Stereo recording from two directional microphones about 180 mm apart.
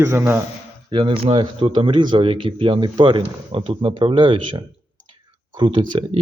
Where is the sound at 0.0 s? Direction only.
10° right (ahead or behind).